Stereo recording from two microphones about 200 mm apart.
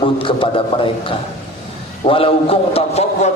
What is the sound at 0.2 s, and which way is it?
Speech, 25° left (ahead or behind).